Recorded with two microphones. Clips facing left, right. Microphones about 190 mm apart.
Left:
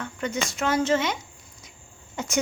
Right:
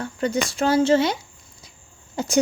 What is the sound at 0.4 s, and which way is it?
Speech, 35° right (ahead or behind).